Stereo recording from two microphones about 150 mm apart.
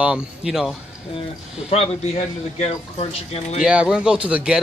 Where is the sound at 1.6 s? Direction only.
45° left (ahead or behind).